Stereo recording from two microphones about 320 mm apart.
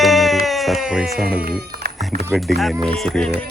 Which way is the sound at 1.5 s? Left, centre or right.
Right.